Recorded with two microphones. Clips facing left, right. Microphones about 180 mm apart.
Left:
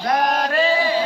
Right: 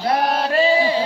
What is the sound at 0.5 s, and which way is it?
Chant, 30° right (ahead or behind).